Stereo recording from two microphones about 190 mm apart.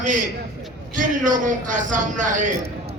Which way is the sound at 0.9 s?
45° right (ahead or behind).